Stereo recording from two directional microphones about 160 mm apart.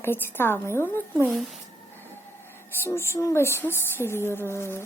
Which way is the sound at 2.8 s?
15° left (ahead or behind).